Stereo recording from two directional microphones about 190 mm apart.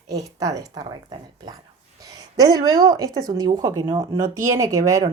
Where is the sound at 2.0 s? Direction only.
20° right (ahead or behind).